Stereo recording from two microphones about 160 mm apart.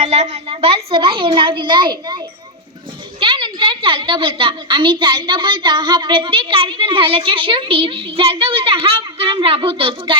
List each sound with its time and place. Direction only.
0.0 s a woman's voice: 40° right (ahead or behind)
3.2 s a woman's voice: 30° right (ahead or behind)